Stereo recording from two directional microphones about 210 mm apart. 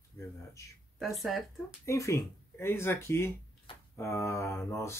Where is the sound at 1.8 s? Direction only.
15° left (ahead or behind).